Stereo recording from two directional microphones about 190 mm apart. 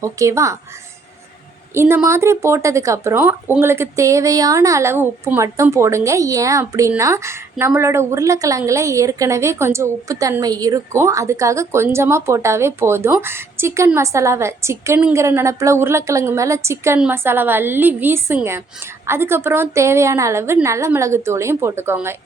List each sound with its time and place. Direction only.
0.0 s speech: 15° right (ahead or behind)
1.7 s speech: 15° right (ahead or behind)